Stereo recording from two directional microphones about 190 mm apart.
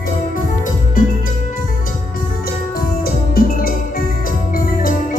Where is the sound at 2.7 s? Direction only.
50° left (ahead or behind).